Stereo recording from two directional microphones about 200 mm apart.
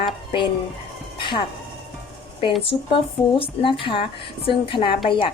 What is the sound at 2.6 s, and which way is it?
Speech, 25° left (ahead or behind).